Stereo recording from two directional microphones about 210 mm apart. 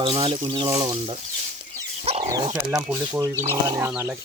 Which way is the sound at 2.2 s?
15° right (ahead or behind).